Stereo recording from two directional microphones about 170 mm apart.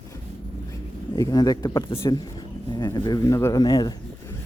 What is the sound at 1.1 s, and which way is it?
Speech, 20° left (ahead or behind).